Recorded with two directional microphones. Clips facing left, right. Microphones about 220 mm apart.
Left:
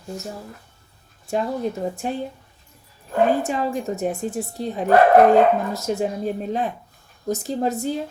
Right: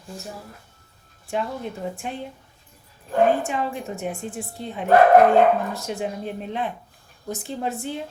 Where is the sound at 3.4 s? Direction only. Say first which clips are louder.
Left 4 dB; 40° left (ahead or behind).